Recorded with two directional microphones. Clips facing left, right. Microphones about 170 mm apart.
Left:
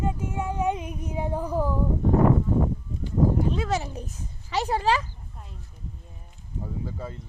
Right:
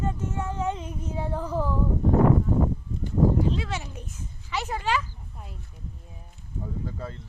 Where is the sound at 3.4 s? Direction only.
45° left (ahead or behind).